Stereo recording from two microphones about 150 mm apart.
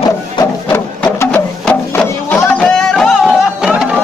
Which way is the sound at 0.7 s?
15° left (ahead or behind).